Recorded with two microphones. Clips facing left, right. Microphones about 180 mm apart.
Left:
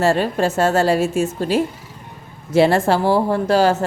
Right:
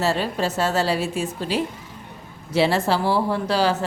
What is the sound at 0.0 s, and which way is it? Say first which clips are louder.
Speech: left 5 dB; 50° left (ahead or behind).